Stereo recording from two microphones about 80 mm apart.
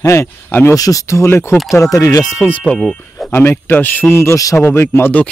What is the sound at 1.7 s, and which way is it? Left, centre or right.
Speech, left.